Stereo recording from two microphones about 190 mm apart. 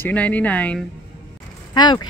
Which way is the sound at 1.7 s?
25° left (ahead or behind).